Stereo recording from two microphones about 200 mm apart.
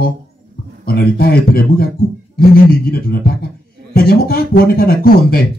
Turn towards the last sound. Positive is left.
turn(degrees=50)  # may be behind; listen again after turning